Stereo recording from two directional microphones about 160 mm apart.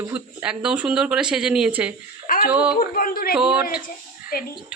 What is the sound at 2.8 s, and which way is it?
Speech, 65° left (ahead or behind).